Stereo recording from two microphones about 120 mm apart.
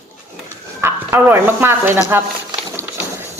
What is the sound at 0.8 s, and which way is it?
Speech, 20° right (ahead or behind).